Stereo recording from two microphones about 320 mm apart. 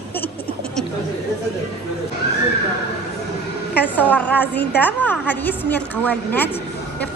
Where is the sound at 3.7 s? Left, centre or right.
Centre.